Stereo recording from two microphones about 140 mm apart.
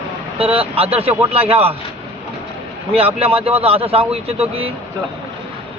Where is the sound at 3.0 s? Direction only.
45° right (ahead or behind).